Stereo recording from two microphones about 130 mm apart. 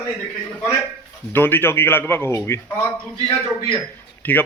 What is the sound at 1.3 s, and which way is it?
A man's voice, 15° left (ahead or behind).